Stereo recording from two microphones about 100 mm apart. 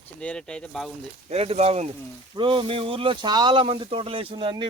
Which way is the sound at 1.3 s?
90° right.